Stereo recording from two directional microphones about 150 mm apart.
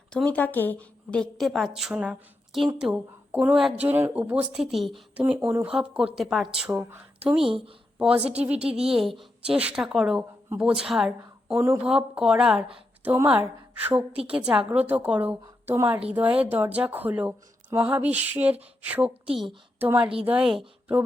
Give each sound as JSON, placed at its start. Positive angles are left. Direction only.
{"t": 0.1, "sound": "a woman's voice", "side_deg": 5}
{"t": 5.5, "sound": "a woman's voice", "side_deg": -15}
{"t": 6.7, "sound": "a woman's voice", "side_deg": -15}